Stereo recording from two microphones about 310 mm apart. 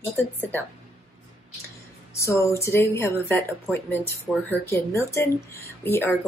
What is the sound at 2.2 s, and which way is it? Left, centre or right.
Speech, centre.